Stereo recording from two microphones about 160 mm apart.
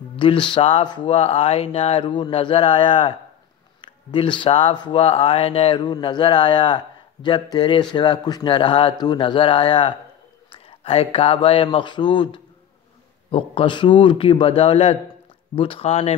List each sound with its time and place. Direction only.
0.1 s speech: 30° left (ahead or behind)